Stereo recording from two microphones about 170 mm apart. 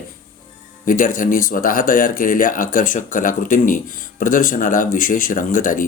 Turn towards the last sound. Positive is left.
turn(degrees=55)  # may be behind; listen again after turning